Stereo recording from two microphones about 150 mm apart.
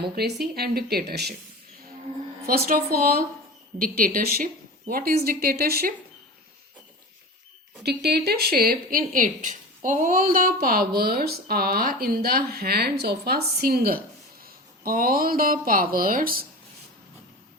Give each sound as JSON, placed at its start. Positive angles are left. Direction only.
{"t": 0.2, "sound": "speech", "side_deg": -90}
{"t": 2.5, "sound": "speech", "side_deg": -70}
{"t": 7.9, "sound": "speech", "side_deg": -90}